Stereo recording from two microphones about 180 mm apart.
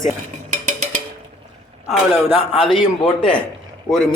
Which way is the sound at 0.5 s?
45° right (ahead or behind).